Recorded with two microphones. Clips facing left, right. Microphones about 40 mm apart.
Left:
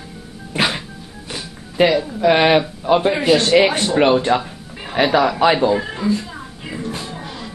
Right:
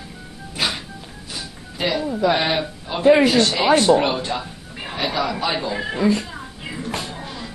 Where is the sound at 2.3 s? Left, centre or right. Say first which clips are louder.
Left 11 dB; left.